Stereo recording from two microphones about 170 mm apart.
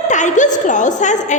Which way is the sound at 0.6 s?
45° left (ahead or behind).